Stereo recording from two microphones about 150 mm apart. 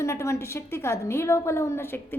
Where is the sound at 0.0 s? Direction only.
20° left (ahead or behind).